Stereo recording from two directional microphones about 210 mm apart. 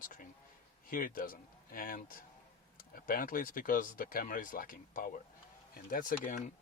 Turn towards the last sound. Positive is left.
turn(degrees=35)  # may be behind; listen again after turning